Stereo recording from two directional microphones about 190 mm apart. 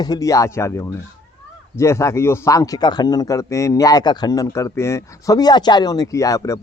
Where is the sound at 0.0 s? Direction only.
20° left (ahead or behind).